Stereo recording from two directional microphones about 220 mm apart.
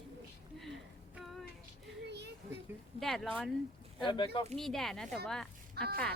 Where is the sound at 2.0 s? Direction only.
50° right (ahead or behind).